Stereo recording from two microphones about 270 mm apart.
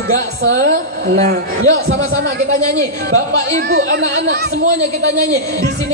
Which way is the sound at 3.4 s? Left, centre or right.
Right.